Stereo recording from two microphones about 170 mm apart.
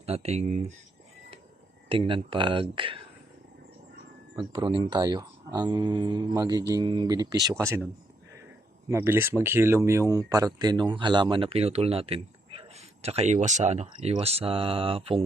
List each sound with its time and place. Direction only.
0.0 s speech: 40° right (ahead or behind)
1.9 s speech: 30° right (ahead or behind)
4.4 s speech: 30° right (ahead or behind)
8.9 s speech: 15° right (ahead or behind); by 15.2 s 35° right (ahead or behind)